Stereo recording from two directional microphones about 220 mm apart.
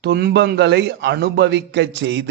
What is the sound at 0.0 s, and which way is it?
Mantra, 50° right (ahead or behind).